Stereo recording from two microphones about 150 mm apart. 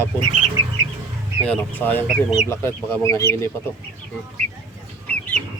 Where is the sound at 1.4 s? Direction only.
10° left (ahead or behind).